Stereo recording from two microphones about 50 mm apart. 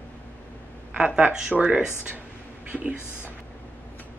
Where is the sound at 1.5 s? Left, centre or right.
Right.